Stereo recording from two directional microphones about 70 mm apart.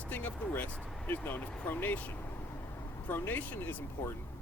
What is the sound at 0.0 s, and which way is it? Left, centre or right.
Speech, left.